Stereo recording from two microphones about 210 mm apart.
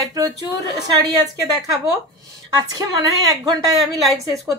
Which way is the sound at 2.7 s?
15° right (ahead or behind).